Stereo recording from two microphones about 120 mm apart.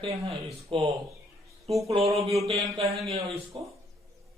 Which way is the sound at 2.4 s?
55° right (ahead or behind).